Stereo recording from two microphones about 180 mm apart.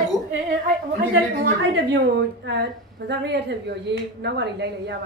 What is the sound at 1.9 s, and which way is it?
Speech, 75° right (ahead or behind).